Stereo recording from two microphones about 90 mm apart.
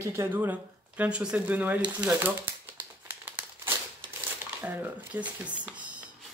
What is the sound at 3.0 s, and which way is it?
Crumpling, 20° right (ahead or behind).